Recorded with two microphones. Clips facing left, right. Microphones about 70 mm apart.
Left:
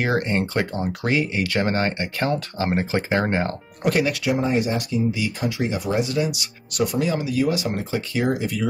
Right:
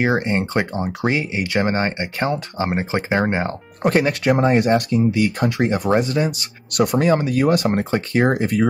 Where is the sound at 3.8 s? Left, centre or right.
Right.